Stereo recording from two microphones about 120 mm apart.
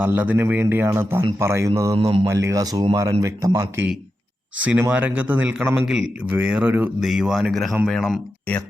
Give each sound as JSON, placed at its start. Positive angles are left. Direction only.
{"t": 0.0, "sound": "a man's voice", "side_deg": -15}
{"t": 2.0, "sound": "speech", "side_deg": -55}
{"t": 2.2, "sound": "a man's voice", "side_deg": -25}
{"t": 4.6, "sound": "a man's voice", "side_deg": -10}